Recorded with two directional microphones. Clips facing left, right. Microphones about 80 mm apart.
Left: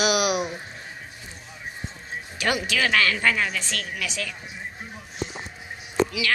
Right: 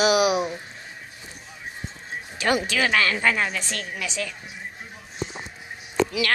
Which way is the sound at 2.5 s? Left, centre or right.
Right.